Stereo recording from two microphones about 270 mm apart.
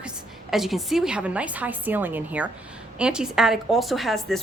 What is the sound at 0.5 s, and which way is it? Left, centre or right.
A woman's voice, centre.